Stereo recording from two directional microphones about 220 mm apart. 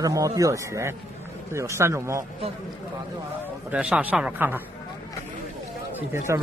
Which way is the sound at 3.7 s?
5° right (ahead or behind).